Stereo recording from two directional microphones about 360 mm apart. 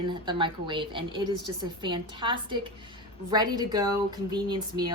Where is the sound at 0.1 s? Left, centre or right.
Centre.